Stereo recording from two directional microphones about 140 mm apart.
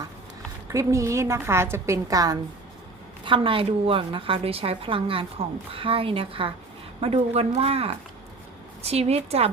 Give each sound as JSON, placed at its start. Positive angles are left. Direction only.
{"t": 0.7, "sound": "a woman's voice", "side_deg": -20}
{"t": 3.2, "sound": "a woman's voice", "side_deg": -40}